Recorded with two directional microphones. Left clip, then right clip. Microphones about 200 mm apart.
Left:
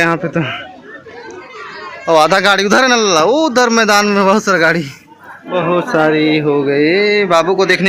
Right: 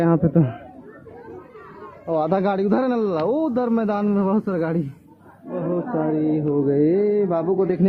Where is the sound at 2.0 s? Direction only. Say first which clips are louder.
Left 12 dB; 35° left (ahead or behind).